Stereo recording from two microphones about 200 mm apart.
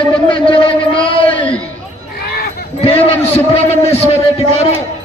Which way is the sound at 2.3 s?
50° left (ahead or behind).